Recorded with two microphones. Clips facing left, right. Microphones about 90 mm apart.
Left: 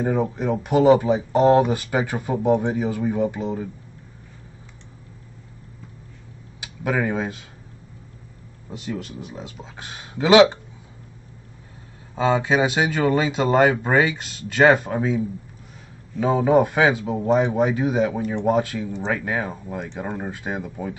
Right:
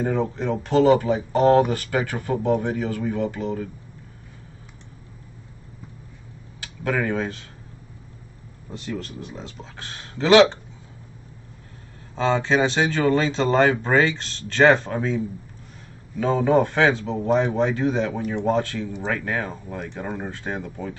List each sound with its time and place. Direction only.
0.0 s speech: 10° left (ahead or behind)
6.6 s speech: 10° left (ahead or behind)
8.6 s speech: 10° left (ahead or behind)
12.2 s speech: 10° left (ahead or behind)